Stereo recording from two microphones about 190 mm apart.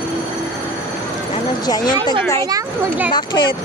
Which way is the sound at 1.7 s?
20° left (ahead or behind).